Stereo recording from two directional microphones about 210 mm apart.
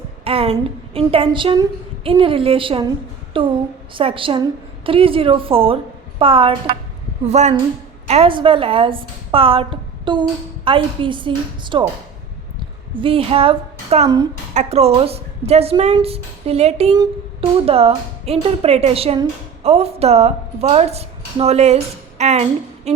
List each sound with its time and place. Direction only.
0.3 s speech: 30° right (ahead or behind)
12.9 s a woman's voice: 25° right (ahead or behind)